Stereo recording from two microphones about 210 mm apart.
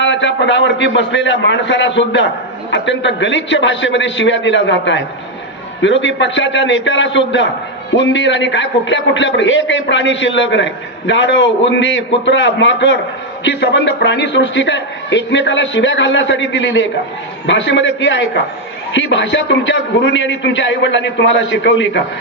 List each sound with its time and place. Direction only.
0.0 s a man's voice: 60° left (ahead or behind)